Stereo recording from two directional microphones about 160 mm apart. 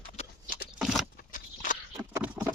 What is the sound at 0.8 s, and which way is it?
Keys jangling, centre (ahead or behind).